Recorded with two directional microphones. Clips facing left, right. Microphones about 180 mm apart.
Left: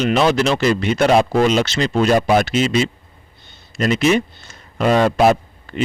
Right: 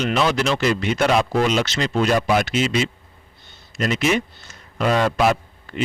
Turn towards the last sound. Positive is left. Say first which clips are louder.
# left 5 dB
turn(degrees=40)  # may be behind; listen again after turning